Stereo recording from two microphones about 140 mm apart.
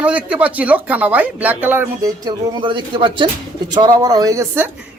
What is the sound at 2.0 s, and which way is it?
Speech, 30° right (ahead or behind).